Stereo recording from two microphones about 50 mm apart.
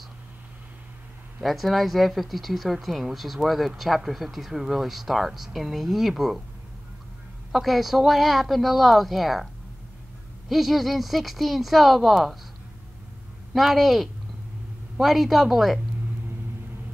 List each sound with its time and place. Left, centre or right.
1.4 s speech: centre
7.5 s speech: centre
10.5 s speech: centre
13.5 s speech: centre